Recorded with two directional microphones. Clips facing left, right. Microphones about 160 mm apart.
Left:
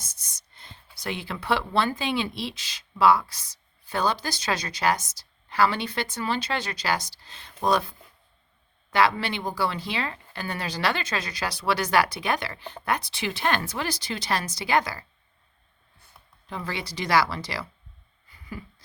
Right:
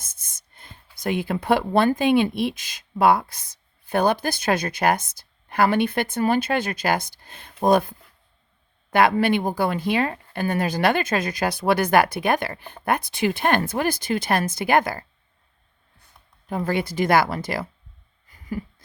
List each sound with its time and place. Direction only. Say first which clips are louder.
0.0 s speech: left 1 dB; 50° right (ahead or behind)
16.5 s speech: right 9 dB; 50° right (ahead or behind)
18.3 s a sound: right 9 dB; 45° right (ahead or behind)